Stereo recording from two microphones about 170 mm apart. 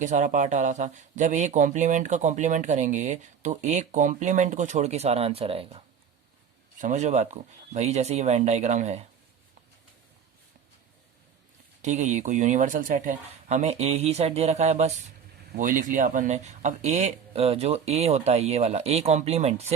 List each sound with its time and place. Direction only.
0.0 s speech: 45° right (ahead or behind)
6.7 s speech: 45° right (ahead or behind)
11.8 s speech: 45° right (ahead or behind)